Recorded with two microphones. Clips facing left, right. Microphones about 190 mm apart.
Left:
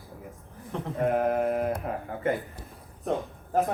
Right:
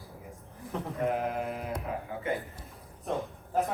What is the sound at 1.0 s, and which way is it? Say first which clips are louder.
Speech: left 7 dB; 50° left (ahead or behind).